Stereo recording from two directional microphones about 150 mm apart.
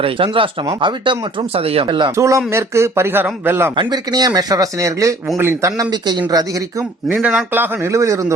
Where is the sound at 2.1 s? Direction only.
20° right (ahead or behind).